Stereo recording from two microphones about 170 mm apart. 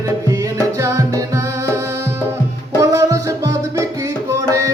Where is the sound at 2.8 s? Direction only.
20° right (ahead or behind).